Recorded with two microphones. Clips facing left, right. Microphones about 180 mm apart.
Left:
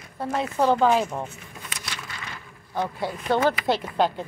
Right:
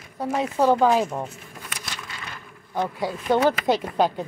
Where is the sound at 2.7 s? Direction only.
10° right (ahead or behind).